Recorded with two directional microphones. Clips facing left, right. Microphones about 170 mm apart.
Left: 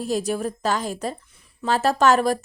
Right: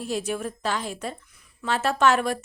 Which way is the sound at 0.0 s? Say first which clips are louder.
Left 4 dB; 40° left (ahead or behind).